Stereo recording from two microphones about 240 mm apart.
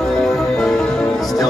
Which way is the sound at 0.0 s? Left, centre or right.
Centre.